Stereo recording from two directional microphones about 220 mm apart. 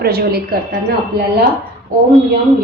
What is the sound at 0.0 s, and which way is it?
Speech, 45° right (ahead or behind).